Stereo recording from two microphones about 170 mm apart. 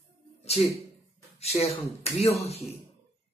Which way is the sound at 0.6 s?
35° left (ahead or behind).